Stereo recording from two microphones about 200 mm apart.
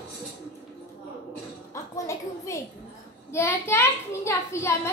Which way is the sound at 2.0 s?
15° left (ahead or behind).